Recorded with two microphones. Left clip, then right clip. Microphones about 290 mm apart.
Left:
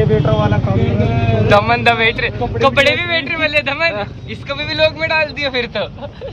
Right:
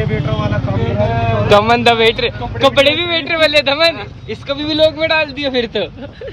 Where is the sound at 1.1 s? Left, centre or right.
Centre.